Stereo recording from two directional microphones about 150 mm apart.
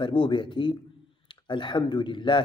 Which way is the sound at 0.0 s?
35° left (ahead or behind).